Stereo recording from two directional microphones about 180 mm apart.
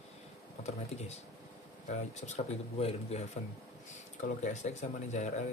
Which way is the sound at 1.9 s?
40° left (ahead or behind).